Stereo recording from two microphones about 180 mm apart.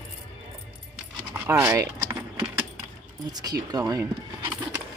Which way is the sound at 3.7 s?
20° right (ahead or behind).